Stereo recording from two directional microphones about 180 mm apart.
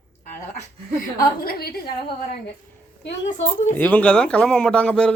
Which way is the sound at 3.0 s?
80° left.